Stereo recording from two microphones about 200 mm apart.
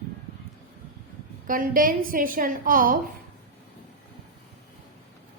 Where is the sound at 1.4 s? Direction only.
45° right (ahead or behind).